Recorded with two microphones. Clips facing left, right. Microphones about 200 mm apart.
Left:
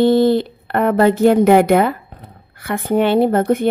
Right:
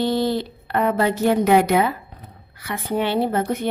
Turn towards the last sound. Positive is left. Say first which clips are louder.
# left 7 dB
turn(degrees=50)  # may be behind; listen again after turning